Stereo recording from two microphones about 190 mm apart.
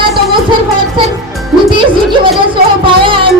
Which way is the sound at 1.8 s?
25° right (ahead or behind).